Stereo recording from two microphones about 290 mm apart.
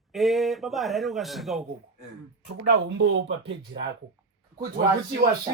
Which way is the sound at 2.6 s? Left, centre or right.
Right.